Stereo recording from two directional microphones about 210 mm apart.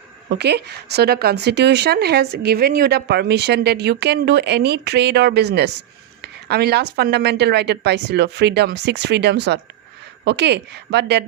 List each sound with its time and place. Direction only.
0.3 s speech: 50° right (ahead or behind)
6.2 s a sound: 50° right (ahead or behind)
6.9 s speech: 50° right (ahead or behind)